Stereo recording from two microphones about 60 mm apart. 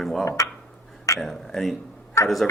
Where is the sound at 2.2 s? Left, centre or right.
Left.